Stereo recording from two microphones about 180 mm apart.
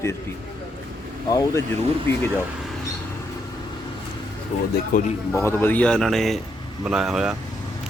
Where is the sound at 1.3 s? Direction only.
20° left (ahead or behind).